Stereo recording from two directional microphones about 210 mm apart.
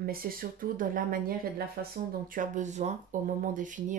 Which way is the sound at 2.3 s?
35° right (ahead or behind).